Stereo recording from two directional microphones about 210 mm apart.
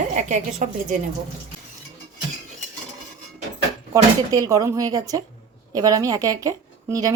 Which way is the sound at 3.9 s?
15° right (ahead or behind).